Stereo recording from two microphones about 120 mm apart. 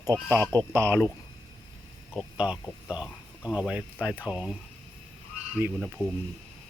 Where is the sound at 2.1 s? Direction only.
5° right (ahead or behind).